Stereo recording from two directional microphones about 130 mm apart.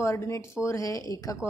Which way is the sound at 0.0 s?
20° left (ahead or behind).